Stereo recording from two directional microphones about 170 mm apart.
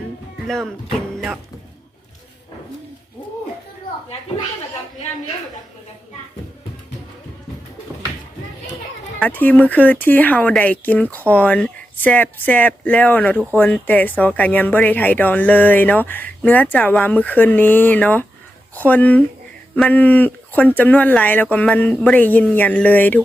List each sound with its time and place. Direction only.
0.4 s speech: centre (ahead or behind)
9.2 s speech: 10° left (ahead or behind)